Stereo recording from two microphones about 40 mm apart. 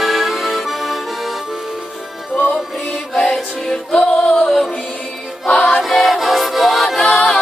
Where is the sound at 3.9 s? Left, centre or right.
Centre.